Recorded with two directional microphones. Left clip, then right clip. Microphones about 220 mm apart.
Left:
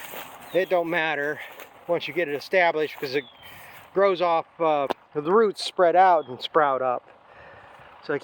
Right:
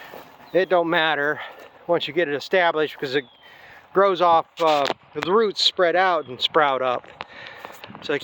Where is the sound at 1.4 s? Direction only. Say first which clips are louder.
Right 3 dB; 25° right (ahead or behind).